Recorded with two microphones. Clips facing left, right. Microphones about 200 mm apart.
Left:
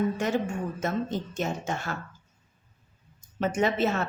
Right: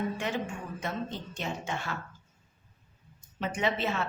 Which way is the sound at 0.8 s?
45° left (ahead or behind).